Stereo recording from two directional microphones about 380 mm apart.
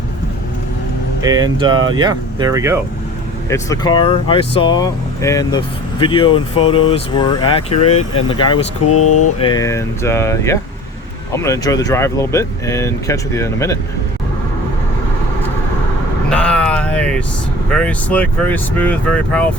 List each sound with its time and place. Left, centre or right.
1.2 s speech: centre
3.5 s speech: centre
8.9 s speech: left
9.4 s speech: centre
16.3 s a sound: centre
17.7 s speech: centre